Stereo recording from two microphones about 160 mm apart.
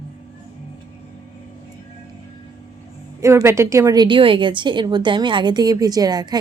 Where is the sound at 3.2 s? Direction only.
15° right (ahead or behind).